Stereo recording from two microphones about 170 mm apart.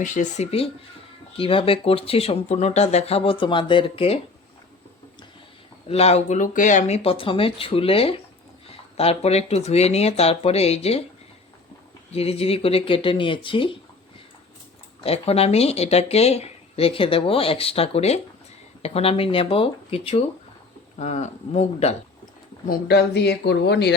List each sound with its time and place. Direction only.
0.0 s speech: 45° left (ahead or behind)
5.9 s speech: 35° left (ahead or behind)
12.1 s speech: 35° left (ahead or behind)
15.0 s speech: 35° left (ahead or behind)
22.6 s speech: 65° left (ahead or behind); by 23.9 s 80° left